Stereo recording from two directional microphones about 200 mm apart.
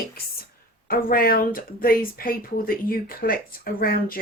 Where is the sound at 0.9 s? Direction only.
45° left (ahead or behind).